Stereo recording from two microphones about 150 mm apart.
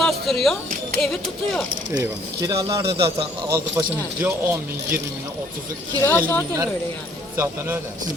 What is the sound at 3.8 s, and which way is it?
Speech, 20° right (ahead or behind).